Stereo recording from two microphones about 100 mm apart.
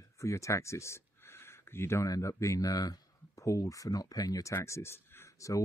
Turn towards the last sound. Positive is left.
turn(degrees=30)  # may be behind; listen again after turning